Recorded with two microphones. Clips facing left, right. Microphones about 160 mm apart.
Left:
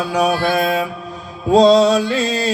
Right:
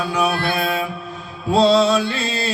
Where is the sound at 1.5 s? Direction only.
40° left (ahead or behind).